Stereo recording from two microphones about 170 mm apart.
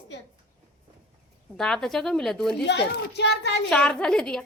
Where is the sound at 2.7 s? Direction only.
85° left.